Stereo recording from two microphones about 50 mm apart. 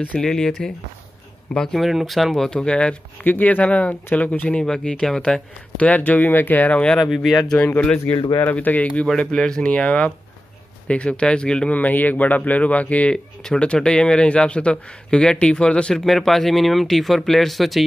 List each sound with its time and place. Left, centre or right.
0.2 s speech: centre
1.5 s speech: centre
1.8 s speech: centre
2.5 s speech: left
3.3 s speech: left
4.6 s speech: centre
5.8 s speech: left
8.1 s speech: left
9.2 s speech: centre
11.7 s speech: left
13.1 s speech: centre
15.9 s speech: centre